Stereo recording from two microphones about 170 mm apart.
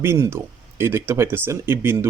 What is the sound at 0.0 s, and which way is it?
Speech, 15° right (ahead or behind).